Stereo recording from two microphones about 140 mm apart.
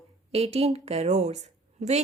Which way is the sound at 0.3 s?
45° right (ahead or behind).